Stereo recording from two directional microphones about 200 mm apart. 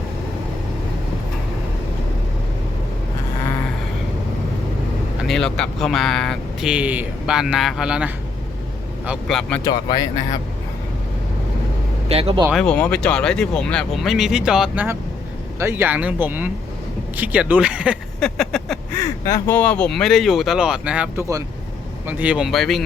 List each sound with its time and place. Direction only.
5.2 s speech: centre (ahead or behind)
9.6 s speech: 20° left (ahead or behind)
12.0 s speech: 30° right (ahead or behind)
12.5 s speech: 5° left (ahead or behind)
18.9 s speech: 15° left (ahead or behind)